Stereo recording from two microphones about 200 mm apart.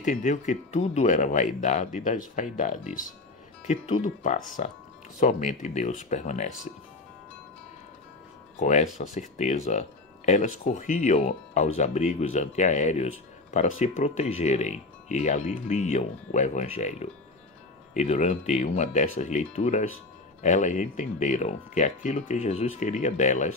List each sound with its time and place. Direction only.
0.0 s speech: 40° left (ahead or behind)
8.5 s speech: 35° left (ahead or behind)